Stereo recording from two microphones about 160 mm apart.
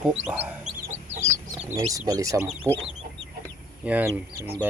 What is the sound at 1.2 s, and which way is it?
Chicken, 20° right (ahead or behind).